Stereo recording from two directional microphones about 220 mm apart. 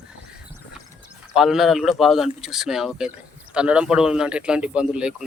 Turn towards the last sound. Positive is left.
turn(degrees=-5)  # may be behind; listen again after turning